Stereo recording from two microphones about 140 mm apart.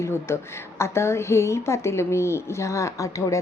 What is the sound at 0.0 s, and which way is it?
A woman's voice, 20° left (ahead or behind).